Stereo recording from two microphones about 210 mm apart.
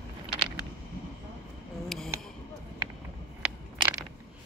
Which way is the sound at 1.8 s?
Centre (ahead or behind).